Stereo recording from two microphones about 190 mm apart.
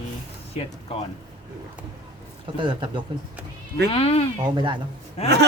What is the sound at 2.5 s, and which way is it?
Speech, 25° right (ahead or behind).